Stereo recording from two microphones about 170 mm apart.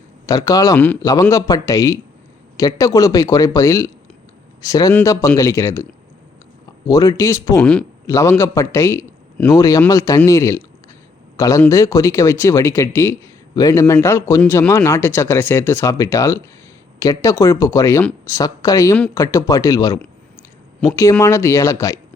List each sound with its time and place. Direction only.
0.3 s a man's voice: 20° left (ahead or behind)
8.0 s a man's voice: 20° left (ahead or behind)